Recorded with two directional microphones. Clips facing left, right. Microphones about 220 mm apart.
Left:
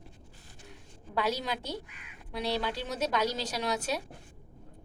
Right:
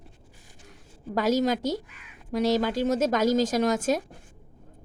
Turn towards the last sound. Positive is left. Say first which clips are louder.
# right 9 dB
turn(degrees=-45)  # may be behind; listen again after turning